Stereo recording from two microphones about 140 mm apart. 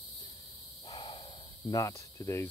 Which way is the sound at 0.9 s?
40° left (ahead or behind).